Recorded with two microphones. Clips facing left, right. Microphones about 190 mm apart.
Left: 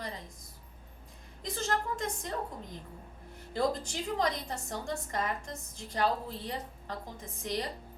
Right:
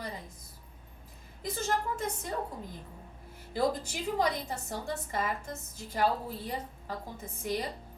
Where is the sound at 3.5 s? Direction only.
5° right (ahead or behind).